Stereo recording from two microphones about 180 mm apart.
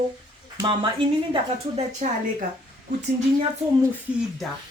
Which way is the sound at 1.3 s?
35° right (ahead or behind).